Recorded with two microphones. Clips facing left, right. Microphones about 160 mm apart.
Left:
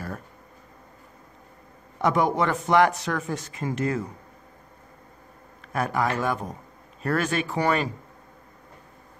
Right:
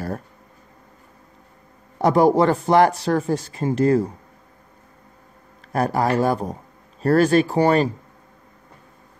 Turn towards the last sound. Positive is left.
turn(degrees=-35)  # may be behind; listen again after turning